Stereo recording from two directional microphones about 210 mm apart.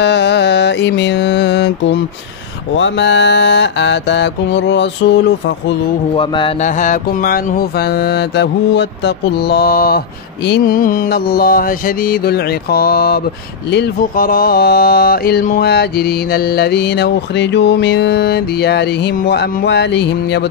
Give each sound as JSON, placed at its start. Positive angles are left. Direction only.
{"t": 0.0, "sound": "mantra", "side_deg": 55}
{"t": 6.1, "sound": "mantra", "side_deg": 25}
{"t": 6.8, "sound": "mantra", "side_deg": 40}